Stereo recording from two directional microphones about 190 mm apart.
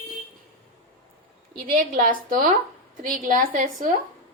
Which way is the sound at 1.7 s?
45° right (ahead or behind).